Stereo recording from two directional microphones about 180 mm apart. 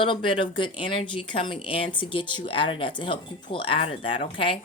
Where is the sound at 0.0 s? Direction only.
25° left (ahead or behind).